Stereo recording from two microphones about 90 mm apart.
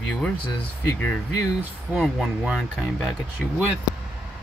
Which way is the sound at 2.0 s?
5° right (ahead or behind).